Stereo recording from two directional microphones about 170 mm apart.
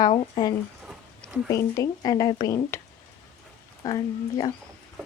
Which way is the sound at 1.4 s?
20° left (ahead or behind).